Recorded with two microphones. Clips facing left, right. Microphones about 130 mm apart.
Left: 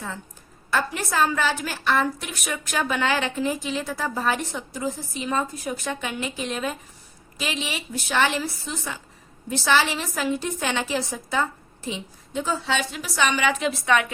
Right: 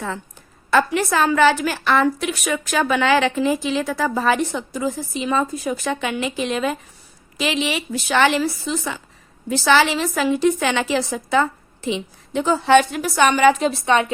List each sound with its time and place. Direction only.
0.7 s a woman's voice: 90° right; by 14.1 s 30° right (ahead or behind)